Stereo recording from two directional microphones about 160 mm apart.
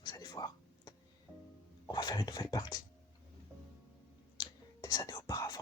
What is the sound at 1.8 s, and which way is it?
Speech, 25° left (ahead or behind).